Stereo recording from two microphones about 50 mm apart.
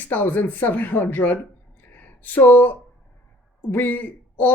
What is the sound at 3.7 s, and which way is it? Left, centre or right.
Speech, left.